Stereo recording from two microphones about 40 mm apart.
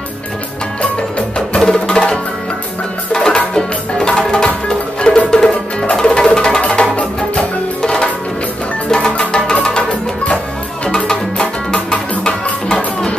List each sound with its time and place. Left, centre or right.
1.6 s music: centre
11.1 s music: centre